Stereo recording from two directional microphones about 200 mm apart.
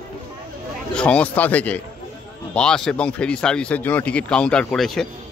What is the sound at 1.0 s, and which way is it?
A man's voice, 5° left (ahead or behind).